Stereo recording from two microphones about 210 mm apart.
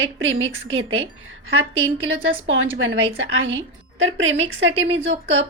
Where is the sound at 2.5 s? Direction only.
65° right (ahead or behind).